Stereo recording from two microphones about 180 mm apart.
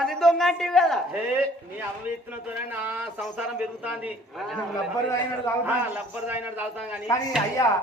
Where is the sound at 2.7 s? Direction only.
10° right (ahead or behind).